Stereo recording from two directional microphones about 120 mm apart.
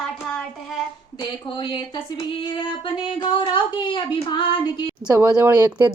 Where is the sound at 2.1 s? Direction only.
35° left (ahead or behind).